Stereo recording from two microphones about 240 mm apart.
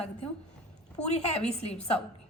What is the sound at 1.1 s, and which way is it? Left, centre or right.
Speech, left.